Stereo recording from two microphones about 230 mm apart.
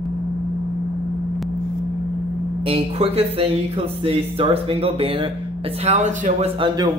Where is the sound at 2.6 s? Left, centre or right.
Right.